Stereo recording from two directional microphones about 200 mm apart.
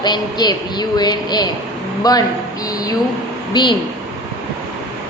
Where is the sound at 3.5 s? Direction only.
20° left (ahead or behind).